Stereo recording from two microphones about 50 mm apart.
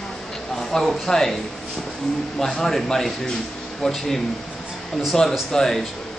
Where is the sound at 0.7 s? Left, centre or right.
Centre.